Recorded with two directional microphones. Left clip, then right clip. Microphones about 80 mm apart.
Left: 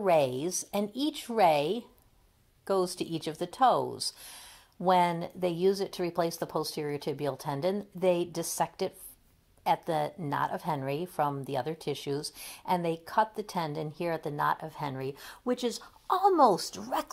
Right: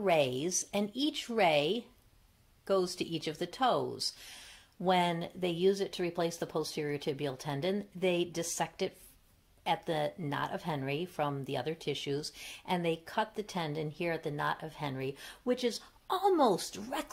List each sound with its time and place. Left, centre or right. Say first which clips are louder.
0.0 s a woman's voice: left 3 dB; left